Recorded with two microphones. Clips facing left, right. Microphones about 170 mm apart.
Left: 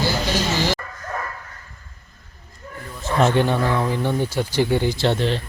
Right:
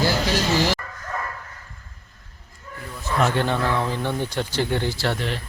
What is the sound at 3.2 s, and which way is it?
Speech, 20° left (ahead or behind).